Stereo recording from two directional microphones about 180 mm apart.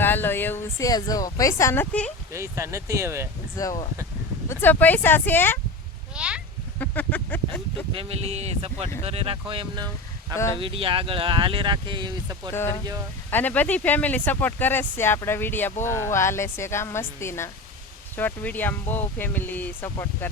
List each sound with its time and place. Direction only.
0.0 s speech: 10° left (ahead or behind)
2.3 s speech: 15° right (ahead or behind)
3.6 s speech: 20° left (ahead or behind)
6.1 s speech: 5° right (ahead or behind)
6.7 s a sound: 10° left (ahead or behind)
7.9 s speech: 35° right (ahead or behind)
10.3 s speech: 15° left (ahead or behind)
10.6 s speech: 30° right (ahead or behind)
12.5 s speech: 15° left (ahead or behind)